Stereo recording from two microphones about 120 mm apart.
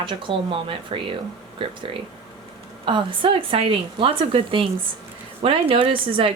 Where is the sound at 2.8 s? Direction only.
45° right (ahead or behind).